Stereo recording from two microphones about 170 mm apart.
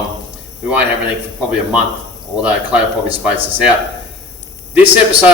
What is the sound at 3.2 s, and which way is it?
Speech, 10° right (ahead or behind).